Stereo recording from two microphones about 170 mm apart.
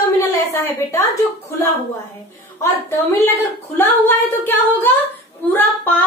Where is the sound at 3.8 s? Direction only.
10° left (ahead or behind).